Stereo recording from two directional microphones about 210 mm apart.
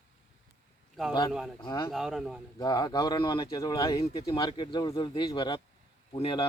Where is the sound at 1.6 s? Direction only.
20° left (ahead or behind).